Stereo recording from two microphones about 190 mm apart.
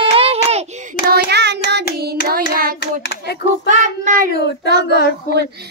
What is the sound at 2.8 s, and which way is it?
Hands, 65° left (ahead or behind).